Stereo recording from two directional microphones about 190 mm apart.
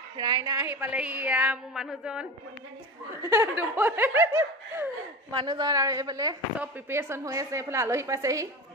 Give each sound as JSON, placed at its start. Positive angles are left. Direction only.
{"t": 0.2, "sound": "a woman's voice", "side_deg": -20}
{"t": 5.3, "sound": "a woman's voice", "side_deg": -25}